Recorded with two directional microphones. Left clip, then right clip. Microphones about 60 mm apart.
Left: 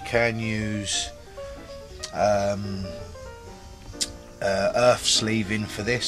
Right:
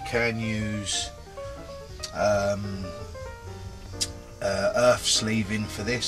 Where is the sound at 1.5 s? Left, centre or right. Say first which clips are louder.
Even; left.